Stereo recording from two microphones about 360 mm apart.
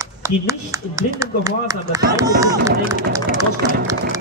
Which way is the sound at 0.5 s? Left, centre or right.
Centre.